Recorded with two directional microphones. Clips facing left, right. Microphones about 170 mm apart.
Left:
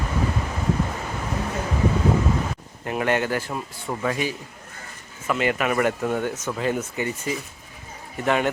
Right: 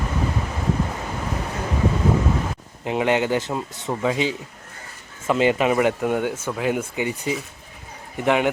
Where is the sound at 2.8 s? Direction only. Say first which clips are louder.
Right 3 dB; 20° right (ahead or behind).